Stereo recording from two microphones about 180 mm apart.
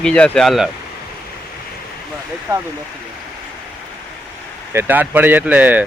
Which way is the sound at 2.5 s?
20° right (ahead or behind).